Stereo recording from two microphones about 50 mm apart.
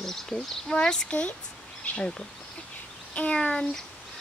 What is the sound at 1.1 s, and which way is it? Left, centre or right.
Speech, left.